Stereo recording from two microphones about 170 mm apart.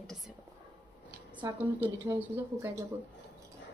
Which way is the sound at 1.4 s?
10° right (ahead or behind).